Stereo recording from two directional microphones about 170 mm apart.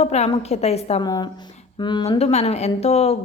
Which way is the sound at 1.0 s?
25° left (ahead or behind).